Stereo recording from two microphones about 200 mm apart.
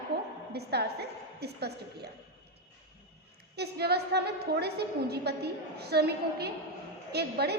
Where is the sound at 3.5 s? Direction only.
55° right (ahead or behind).